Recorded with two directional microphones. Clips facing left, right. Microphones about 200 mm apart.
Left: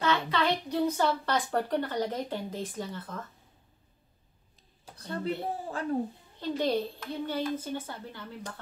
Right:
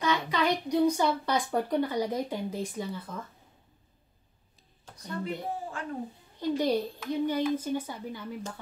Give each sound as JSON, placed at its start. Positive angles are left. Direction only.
{"t": 0.0, "sound": "a woman's voice", "side_deg": -15}
{"t": 4.9, "sound": "a sound", "side_deg": 10}
{"t": 5.2, "sound": "speech", "side_deg": 35}
{"t": 6.4, "sound": "speech", "side_deg": -15}